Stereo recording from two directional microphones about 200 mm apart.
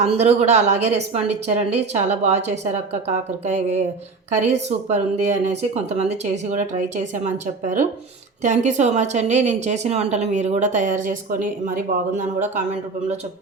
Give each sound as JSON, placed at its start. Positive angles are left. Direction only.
{"t": 0.0, "sound": "a woman's voice", "side_deg": -35}
{"t": 8.4, "sound": "a woman's voice", "side_deg": -35}